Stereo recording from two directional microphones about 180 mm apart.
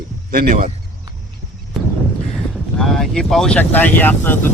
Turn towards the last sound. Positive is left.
turn(degrees=10)  # may be behind; listen again after turning